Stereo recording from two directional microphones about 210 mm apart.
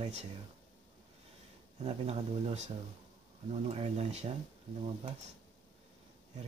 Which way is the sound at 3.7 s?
30° right (ahead or behind).